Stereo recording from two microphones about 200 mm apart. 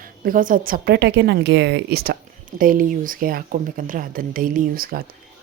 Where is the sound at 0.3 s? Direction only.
45° right (ahead or behind).